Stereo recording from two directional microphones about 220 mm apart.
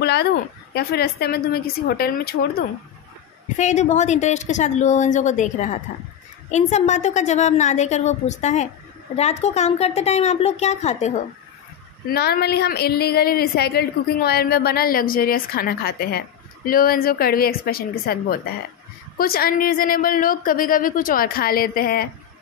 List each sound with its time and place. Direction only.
0.0 s a woman's voice: 50° left (ahead or behind)
3.5 s a woman's voice: 30° left (ahead or behind)
12.1 s a woman's voice: 45° left (ahead or behind)